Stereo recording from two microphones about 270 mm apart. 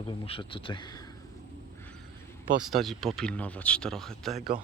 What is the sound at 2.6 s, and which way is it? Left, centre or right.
Speech, centre.